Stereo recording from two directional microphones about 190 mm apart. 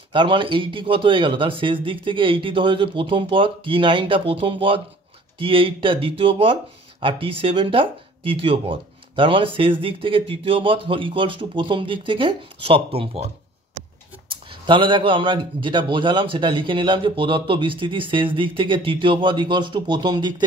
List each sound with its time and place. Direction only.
0.1 s speech: 25° right (ahead or behind)
14.3 s speech: 25° right (ahead or behind)